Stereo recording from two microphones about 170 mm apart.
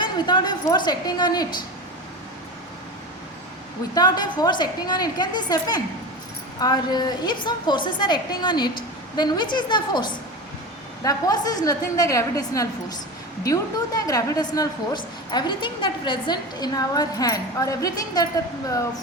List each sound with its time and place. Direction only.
0.0 s a woman's voice: 25° left (ahead or behind)
3.9 s a woman's voice: 25° left (ahead or behind)